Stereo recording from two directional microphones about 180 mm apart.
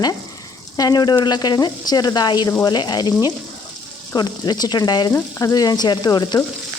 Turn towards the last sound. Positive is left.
turn(degrees=25)  # may be behind; listen again after turning